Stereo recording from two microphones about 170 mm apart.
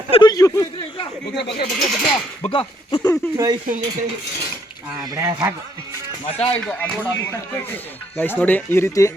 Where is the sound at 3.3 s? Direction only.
20° right (ahead or behind).